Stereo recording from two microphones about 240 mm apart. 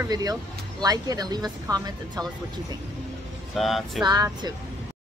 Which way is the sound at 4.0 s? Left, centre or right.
Centre.